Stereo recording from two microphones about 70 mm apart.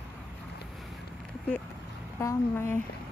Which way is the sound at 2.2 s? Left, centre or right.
Left.